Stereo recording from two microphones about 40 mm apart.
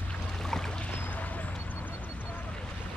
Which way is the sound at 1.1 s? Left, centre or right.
Left.